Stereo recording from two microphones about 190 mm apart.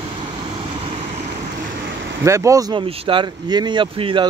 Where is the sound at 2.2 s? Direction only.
15° right (ahead or behind).